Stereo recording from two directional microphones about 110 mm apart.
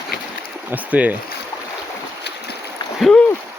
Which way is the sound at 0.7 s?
15° right (ahead or behind).